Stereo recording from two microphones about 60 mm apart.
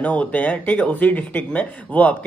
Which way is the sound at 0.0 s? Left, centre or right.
Left.